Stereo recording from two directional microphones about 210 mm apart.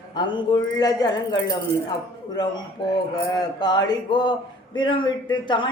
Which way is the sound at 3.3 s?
20° left (ahead or behind).